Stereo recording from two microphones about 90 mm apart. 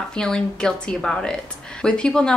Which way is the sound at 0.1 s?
10° left (ahead or behind).